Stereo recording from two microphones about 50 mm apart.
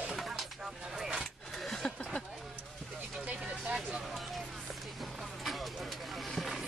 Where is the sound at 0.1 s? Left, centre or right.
Centre.